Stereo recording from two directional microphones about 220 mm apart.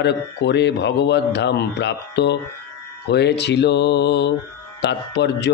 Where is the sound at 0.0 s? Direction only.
50° left (ahead or behind).